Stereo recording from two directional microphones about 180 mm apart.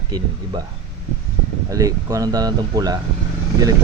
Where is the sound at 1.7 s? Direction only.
20° right (ahead or behind).